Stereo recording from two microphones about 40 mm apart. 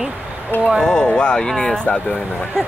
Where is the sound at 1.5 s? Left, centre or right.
Centre.